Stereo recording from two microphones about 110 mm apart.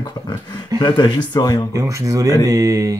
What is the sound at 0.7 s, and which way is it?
Speech, 45° left (ahead or behind).